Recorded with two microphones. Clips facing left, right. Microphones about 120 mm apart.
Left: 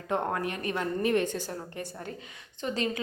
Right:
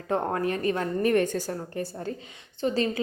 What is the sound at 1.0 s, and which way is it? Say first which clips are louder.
A woman's voice: right 5 dB; 45° right (ahead or behind).